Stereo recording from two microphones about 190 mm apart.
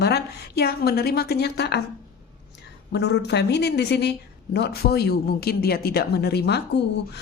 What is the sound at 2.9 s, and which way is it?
Speech, 60° left (ahead or behind).